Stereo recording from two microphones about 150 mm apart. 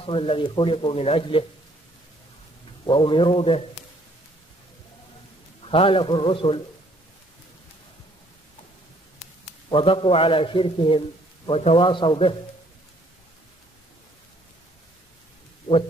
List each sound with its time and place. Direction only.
0.0 s a man's voice: 40° left (ahead or behind)
2.9 s a man's voice: 35° left (ahead or behind)
5.7 s a man's voice: 35° left (ahead or behind)
9.7 s a man's voice: 35° left (ahead or behind)